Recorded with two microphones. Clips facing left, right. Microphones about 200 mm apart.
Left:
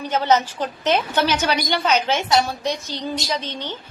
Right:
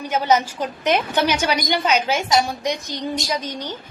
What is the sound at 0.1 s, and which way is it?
A woman's voice, 10° right (ahead or behind).